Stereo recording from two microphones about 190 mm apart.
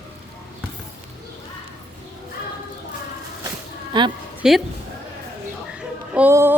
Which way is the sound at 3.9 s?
25° right (ahead or behind).